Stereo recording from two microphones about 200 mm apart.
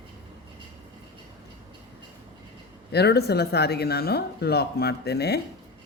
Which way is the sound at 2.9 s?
55° left (ahead or behind).